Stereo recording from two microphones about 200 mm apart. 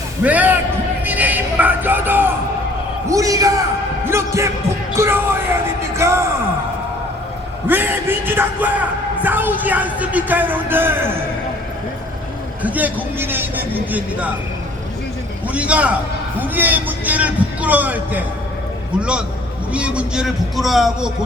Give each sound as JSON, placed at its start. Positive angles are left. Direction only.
{"t": 0.2, "sound": "a man's voice", "side_deg": -10}
{"t": 1.0, "sound": "a sound", "side_deg": -10}
{"t": 3.1, "sound": "a man's voice", "side_deg": -15}
{"t": 4.0, "sound": "music", "side_deg": -15}
{"t": 7.7, "sound": "speech", "side_deg": -10}
{"t": 12.6, "sound": "a man's voice", "side_deg": -10}
{"t": 15.5, "sound": "a man's voice", "side_deg": -5}